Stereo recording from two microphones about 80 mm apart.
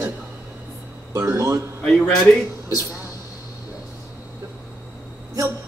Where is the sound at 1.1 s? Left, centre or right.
Right.